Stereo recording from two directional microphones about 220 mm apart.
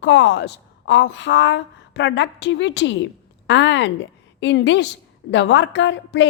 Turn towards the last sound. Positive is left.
turn(degrees=55)  # may be behind; listen again after turning